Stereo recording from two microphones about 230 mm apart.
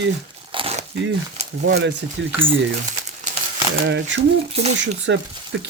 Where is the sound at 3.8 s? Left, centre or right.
Right.